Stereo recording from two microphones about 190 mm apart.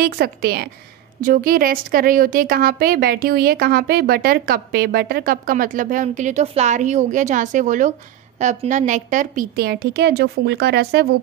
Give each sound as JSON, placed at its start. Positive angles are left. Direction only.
{"t": 0.0, "sound": "a woman's voice", "side_deg": -55}